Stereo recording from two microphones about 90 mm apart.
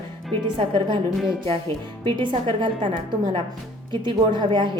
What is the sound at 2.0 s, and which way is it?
A woman's voice, 65° right (ahead or behind).